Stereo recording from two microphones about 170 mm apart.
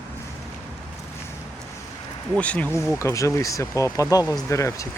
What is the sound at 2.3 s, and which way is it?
Speech, 5° left (ahead or behind).